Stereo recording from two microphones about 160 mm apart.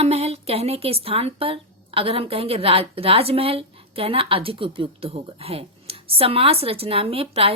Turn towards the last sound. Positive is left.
turn(degrees=-40)  # may be behind; listen again after turning